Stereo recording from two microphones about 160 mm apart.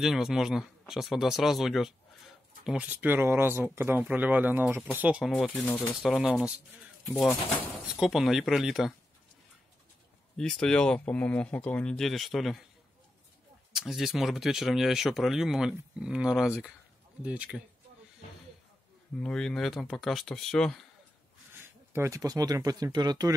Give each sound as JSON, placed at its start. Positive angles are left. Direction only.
{"t": 0.0, "sound": "speech", "side_deg": 0}
{"t": 7.9, "sound": "speech", "side_deg": -5}
{"t": 10.3, "sound": "speech", "side_deg": 5}
{"t": 13.7, "sound": "speech", "side_deg": 0}
{"t": 19.1, "sound": "speech", "side_deg": 5}
{"t": 21.5, "sound": "speech", "side_deg": -15}